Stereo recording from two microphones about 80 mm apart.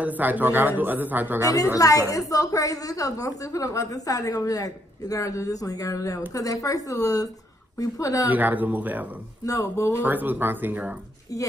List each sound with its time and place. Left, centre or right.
0.0 s a man's voice: right
1.8 s a woman's voice: left
8.3 s a man's voice: right
9.5 s speech: left
10.0 s a man's voice: right